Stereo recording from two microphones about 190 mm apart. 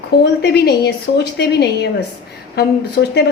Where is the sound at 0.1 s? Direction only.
55° left (ahead or behind).